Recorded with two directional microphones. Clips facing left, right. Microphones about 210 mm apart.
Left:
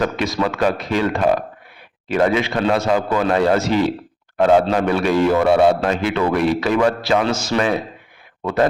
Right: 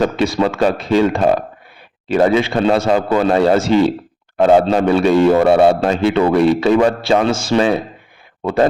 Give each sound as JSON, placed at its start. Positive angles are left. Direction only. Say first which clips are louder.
{"t": 0.0, "sound": "speech", "louder": "right 4 dB", "side_deg": -30}